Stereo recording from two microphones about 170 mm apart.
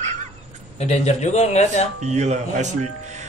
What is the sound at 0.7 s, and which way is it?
Speech, 40° left (ahead or behind).